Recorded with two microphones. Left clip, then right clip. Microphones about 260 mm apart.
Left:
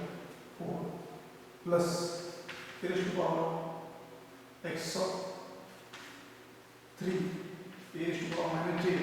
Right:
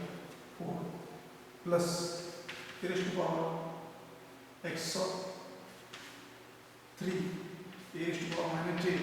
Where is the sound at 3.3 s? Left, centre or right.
Right.